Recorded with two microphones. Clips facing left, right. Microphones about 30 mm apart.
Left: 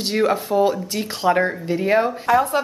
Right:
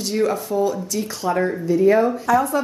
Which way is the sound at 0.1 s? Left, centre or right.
Left.